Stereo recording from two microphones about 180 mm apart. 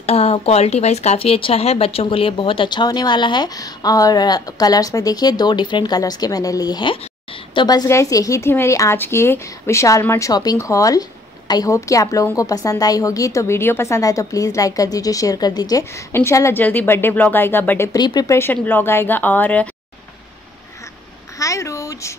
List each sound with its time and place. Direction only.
0.0 s a woman's voice: 35° left (ahead or behind); by 19.7 s 10° left (ahead or behind)
21.4 s speech: 15° left (ahead or behind)